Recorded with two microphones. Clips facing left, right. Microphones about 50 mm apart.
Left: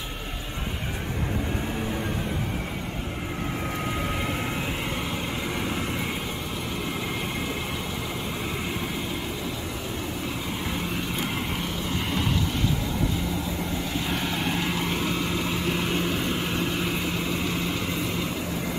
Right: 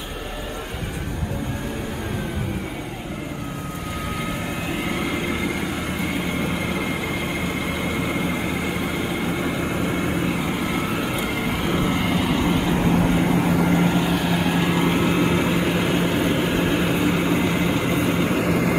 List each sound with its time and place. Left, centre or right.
10.7 s vehicle: centre
12.7 s vehicle: right
14.0 s vehicle: centre; by 18.3 s right
18.3 s vehicle: right